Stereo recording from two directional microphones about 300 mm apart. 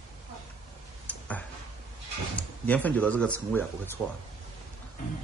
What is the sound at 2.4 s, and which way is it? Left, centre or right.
Speech, centre.